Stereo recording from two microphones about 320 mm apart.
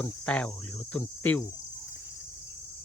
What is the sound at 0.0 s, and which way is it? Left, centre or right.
Speech, centre.